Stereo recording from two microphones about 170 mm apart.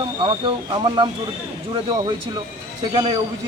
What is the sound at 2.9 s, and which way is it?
Speech, 25° right (ahead or behind).